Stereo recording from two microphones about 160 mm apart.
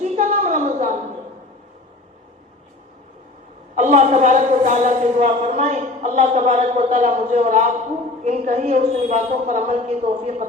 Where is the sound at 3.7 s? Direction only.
45° right (ahead or behind).